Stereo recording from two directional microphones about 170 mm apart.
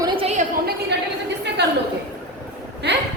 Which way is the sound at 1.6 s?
85° right.